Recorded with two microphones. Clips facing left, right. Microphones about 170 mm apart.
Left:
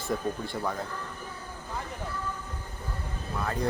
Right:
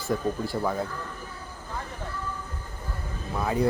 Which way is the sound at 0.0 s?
5° right (ahead or behind).